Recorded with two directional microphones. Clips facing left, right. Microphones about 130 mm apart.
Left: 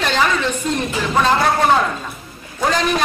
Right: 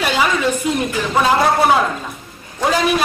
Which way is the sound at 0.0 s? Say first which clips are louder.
Right 1 dB; 10° right (ahead or behind).